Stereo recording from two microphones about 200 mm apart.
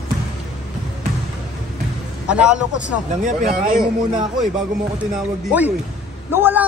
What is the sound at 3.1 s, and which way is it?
Speech, 35° right (ahead or behind).